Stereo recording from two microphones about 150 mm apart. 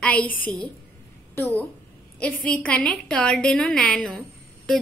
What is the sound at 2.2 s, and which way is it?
A woman's voice, 10° left (ahead or behind).